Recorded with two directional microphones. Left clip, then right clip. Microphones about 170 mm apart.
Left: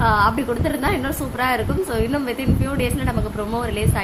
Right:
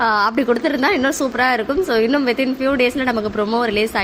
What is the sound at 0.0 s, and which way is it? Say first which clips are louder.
A woman's voice: right 1 dB; 25° right (ahead or behind).